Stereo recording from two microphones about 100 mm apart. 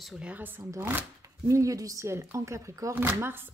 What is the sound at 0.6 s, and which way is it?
Speech, 30° right (ahead or behind).